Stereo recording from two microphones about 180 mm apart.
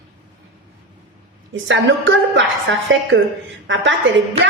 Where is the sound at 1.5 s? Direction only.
90° right.